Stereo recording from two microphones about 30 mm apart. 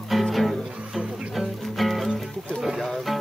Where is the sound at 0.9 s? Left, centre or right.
Centre.